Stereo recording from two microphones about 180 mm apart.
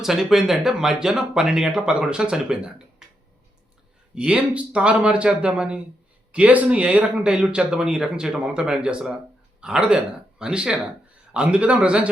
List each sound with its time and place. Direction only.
0.0 s speech: centre (ahead or behind)
4.1 s a man's voice: 5° right (ahead or behind)